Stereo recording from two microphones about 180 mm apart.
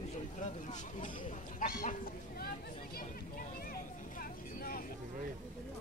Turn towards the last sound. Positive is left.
turn(degrees=55)  # may be behind; listen again after turning